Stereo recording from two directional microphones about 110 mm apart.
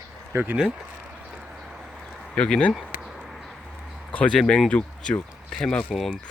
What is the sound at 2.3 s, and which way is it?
Speech, 5° left (ahead or behind).